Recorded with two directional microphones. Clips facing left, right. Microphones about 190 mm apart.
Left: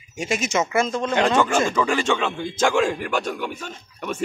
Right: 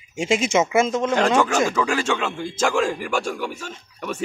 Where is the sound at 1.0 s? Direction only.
5° right (ahead or behind).